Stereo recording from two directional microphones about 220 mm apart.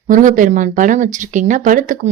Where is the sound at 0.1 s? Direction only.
35° right (ahead or behind).